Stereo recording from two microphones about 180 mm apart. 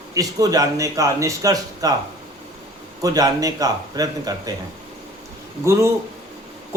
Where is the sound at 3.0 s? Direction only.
20° right (ahead or behind).